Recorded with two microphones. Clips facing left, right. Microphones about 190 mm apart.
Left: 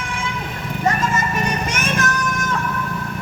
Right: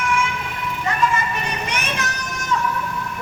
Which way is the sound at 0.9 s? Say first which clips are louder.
Left 1 dB; 45° left (ahead or behind).